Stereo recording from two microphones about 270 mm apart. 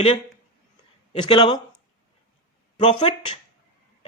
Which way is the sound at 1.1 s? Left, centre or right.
Centre.